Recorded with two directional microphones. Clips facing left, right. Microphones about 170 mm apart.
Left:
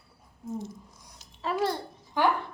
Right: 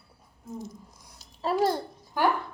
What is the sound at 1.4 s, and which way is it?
Speech, 35° right (ahead or behind).